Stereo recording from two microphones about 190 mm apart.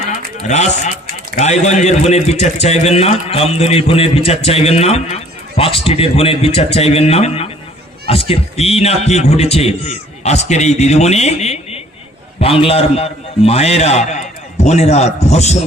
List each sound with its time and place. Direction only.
0.4 s a man's voice: 40° left (ahead or behind)